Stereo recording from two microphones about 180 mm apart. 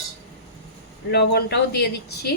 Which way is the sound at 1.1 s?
65° left (ahead or behind).